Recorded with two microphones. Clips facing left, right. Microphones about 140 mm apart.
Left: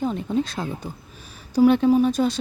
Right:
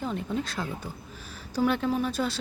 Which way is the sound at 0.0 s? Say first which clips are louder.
Left 7 dB; 20° left (ahead or behind).